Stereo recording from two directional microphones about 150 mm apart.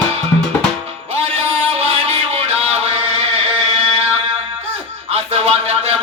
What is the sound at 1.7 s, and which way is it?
Music, 45° right (ahead or behind).